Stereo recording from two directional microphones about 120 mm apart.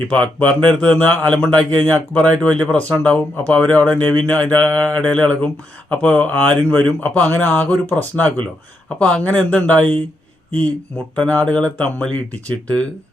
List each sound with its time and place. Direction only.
0.2 s speech: 10° left (ahead or behind)